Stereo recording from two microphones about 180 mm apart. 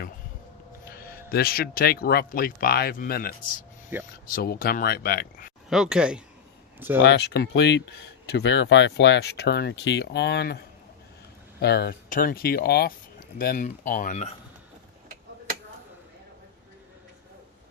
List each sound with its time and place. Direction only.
0.9 s speech: 60° left (ahead or behind)
3.9 s speech: 10° right (ahead or behind)
4.4 s speech: 55° left (ahead or behind)
5.6 s speech: 5° right (ahead or behind)
7.0 s speech: 70° left (ahead or behind)
11.6 s speech: 65° left (ahead or behind); by 14.3 s 40° left (ahead or behind)